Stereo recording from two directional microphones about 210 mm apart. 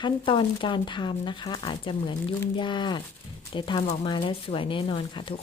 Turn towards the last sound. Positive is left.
turn(degrees=25)  # may be behind; listen again after turning